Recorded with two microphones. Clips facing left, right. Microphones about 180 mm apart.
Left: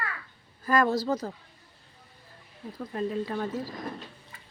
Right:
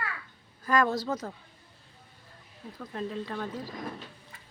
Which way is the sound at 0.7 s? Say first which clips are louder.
Left 2 dB; centre (ahead or behind).